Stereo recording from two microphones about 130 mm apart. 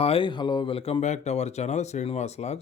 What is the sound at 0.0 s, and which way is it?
Speech, 45° left (ahead or behind).